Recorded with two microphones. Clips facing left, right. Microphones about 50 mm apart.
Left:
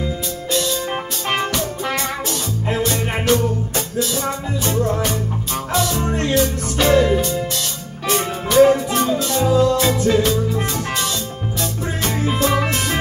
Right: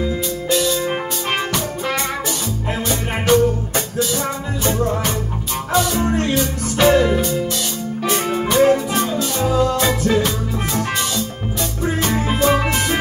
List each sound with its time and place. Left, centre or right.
0.5 s music: centre